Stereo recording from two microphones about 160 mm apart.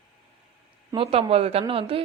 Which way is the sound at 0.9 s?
35° right (ahead or behind).